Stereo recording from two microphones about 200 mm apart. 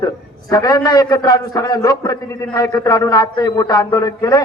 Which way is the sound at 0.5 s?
15° left (ahead or behind).